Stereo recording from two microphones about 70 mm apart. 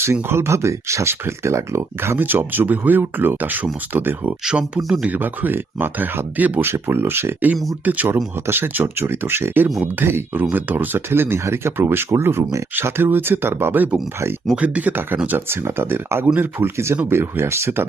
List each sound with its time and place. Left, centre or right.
0.0 s speech: right
4.4 s speech: centre
5.0 s speech: right
6.7 s speech: right
12.4 s speech: right
12.7 s speech: right
14.5 s speech: centre; by 17.8 s right